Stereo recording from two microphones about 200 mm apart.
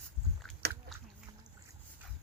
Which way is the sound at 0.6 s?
55° right (ahead or behind).